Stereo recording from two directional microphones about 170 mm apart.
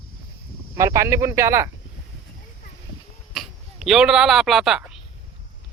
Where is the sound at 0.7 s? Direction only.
15° right (ahead or behind).